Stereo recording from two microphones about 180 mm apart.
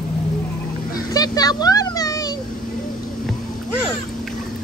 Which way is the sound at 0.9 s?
20° left (ahead or behind).